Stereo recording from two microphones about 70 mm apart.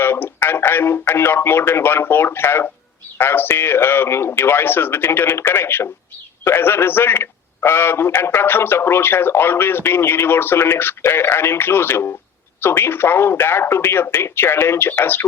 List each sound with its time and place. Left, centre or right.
0.0 s speech: left